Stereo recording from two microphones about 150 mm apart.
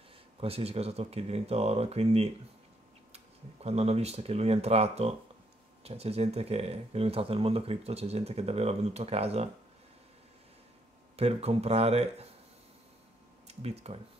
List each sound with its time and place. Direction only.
0.4 s speech: 40° right (ahead or behind)
3.6 s speech: 45° right (ahead or behind)
11.1 s speech: 45° right (ahead or behind)
13.5 s speech: 45° right (ahead or behind)